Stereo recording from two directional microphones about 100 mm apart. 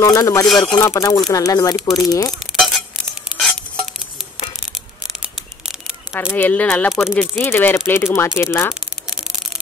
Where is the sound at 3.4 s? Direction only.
Centre (ahead or behind).